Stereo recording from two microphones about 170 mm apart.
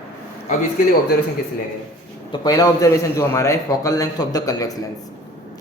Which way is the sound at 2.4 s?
20° left (ahead or behind).